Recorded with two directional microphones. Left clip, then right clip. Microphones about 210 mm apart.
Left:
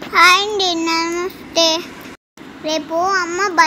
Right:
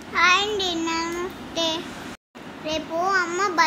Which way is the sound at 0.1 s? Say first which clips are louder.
Left 8 dB; 30° left (ahead or behind).